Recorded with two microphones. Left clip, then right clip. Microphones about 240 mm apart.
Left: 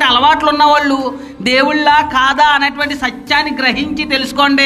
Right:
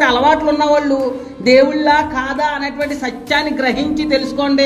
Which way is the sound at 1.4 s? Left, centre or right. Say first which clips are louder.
Right 1 dB; left.